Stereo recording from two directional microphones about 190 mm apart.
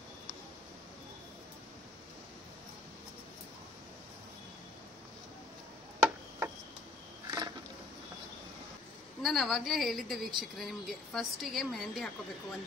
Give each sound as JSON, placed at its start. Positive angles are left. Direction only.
{"t": 5.9, "sound": "tick-tock", "side_deg": -10}
{"t": 7.2, "sound": "a sound", "side_deg": -20}
{"t": 9.2, "sound": "a woman's voice", "side_deg": 0}